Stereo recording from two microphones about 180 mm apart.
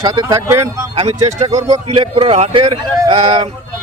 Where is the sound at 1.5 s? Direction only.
20° right (ahead or behind).